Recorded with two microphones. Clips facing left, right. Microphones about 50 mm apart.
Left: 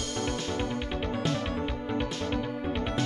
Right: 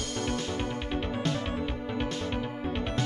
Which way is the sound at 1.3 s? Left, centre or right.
Right.